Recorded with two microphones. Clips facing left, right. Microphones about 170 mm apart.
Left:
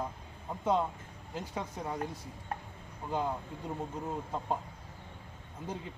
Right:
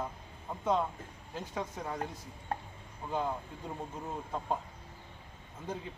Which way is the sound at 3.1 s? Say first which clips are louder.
Left 1 dB; 5° left (ahead or behind).